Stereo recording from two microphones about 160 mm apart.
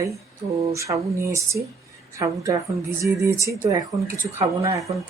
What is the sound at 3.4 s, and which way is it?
Speech, 20° right (ahead or behind).